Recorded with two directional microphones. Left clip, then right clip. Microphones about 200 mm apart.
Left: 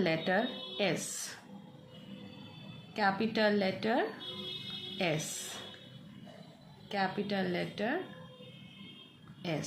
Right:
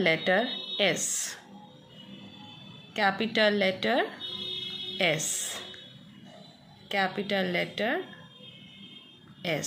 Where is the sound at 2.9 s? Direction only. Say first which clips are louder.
Right 5 dB; 15° right (ahead or behind).